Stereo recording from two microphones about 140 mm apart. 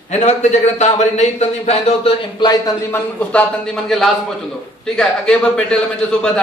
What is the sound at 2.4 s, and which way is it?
Speech, 30° left (ahead or behind).